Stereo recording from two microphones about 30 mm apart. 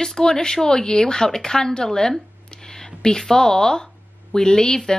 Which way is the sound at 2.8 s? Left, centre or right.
Left.